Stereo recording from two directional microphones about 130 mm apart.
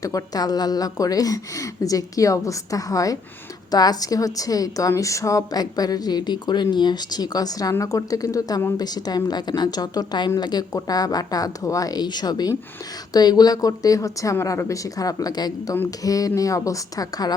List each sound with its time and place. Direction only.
0.0 s a woman's voice: 30° left (ahead or behind)